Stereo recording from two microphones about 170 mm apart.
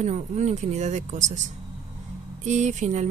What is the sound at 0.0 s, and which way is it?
Speech, 45° right (ahead or behind).